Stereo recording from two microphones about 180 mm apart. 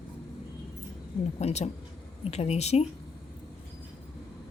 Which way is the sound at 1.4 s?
35° left (ahead or behind).